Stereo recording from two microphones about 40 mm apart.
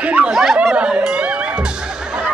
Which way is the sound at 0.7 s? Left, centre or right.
Right.